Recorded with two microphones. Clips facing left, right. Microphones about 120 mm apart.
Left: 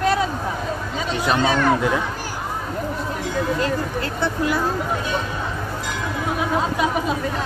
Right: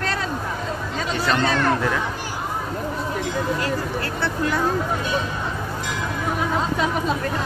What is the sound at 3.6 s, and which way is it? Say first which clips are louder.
Speech: left 2 dB; 20° left (ahead or behind).